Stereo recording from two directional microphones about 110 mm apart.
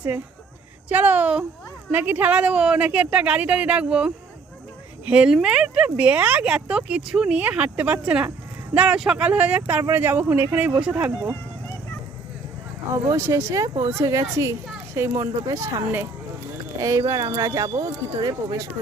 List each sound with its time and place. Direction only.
0.9 s speech: 15° right (ahead or behind)
13.1 s speech: 25° right (ahead or behind)